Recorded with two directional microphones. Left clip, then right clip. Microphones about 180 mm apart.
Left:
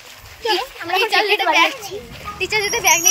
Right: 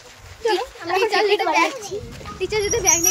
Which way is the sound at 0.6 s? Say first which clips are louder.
Left 2 dB; 5° left (ahead or behind).